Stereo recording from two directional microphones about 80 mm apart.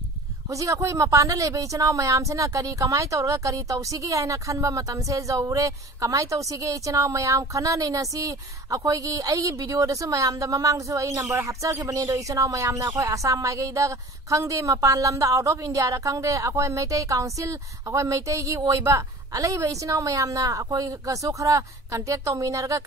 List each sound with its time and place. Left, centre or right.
0.5 s speech: right